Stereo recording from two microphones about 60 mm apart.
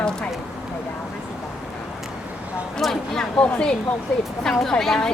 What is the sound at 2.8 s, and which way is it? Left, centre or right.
A woman's voice, centre.